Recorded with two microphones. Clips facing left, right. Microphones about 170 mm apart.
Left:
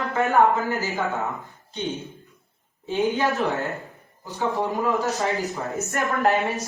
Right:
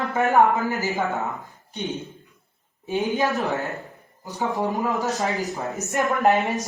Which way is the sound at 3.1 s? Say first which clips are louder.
Right 1 dB; 20° right (ahead or behind).